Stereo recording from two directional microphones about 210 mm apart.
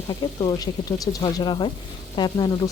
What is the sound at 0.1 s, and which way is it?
Speech, 20° left (ahead or behind).